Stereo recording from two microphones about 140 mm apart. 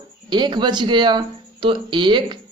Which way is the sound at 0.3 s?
30° right (ahead or behind).